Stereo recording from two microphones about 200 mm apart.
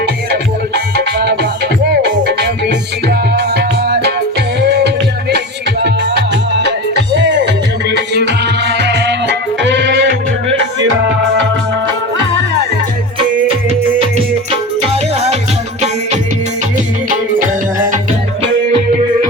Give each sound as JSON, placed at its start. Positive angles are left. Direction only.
{"t": 0.3, "sound": "music", "side_deg": -55}
{"t": 15.1, "sound": "music", "side_deg": -30}